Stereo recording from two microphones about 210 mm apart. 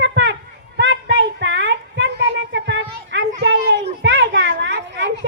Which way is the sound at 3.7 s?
60° right (ahead or behind).